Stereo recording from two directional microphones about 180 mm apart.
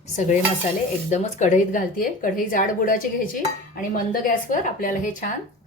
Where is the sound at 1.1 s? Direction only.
40° left (ahead or behind).